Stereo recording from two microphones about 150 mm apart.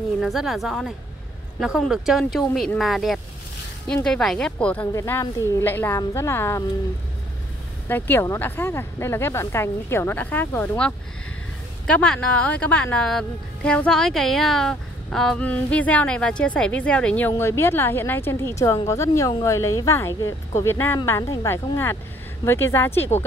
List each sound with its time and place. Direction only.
0.2 s speech: centre (ahead or behind)
4.9 s a woman's voice: 20° left (ahead or behind)
7.9 s a woman's voice: 15° left (ahead or behind)